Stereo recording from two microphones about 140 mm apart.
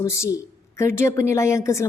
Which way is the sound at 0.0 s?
20° left (ahead or behind).